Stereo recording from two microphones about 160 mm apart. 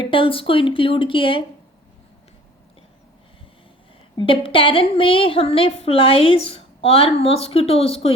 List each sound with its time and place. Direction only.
0.0 s a woman's voice: 35° left (ahead or behind)
4.2 s a woman's voice: 35° left (ahead or behind)